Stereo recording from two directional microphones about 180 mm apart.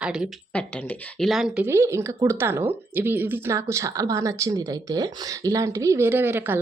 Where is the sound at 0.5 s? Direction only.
10° left (ahead or behind).